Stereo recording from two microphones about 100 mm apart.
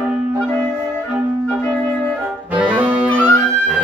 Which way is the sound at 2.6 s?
15° right (ahead or behind).